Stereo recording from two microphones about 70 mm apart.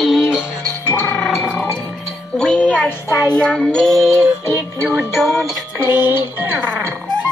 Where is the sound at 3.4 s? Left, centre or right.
Centre.